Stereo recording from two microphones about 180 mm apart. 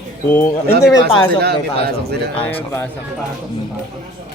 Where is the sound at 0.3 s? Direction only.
10° left (ahead or behind).